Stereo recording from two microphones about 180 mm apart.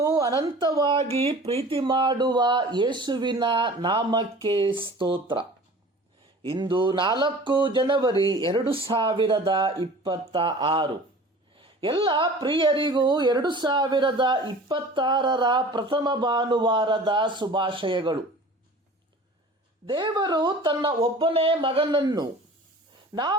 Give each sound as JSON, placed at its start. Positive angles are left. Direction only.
{"t": 0.0, "sound": "speech", "side_deg": -20}
{"t": 19.9, "sound": "speech", "side_deg": -25}